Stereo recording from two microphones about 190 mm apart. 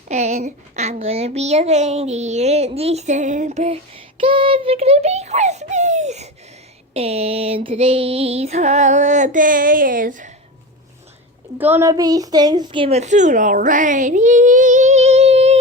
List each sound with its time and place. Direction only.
0.1 s a woman's voice: 35° right (ahead or behind)
11.5 s a child's voice: 10° right (ahead or behind); by 15.5 s 35° right (ahead or behind)